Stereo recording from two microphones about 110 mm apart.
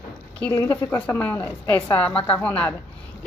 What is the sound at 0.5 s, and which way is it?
A woman's voice, 20° left (ahead or behind).